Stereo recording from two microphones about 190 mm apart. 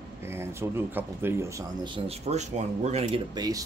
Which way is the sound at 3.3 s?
20° right (ahead or behind).